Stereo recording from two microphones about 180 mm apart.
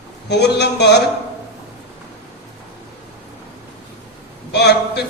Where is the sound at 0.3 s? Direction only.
65° left (ahead or behind).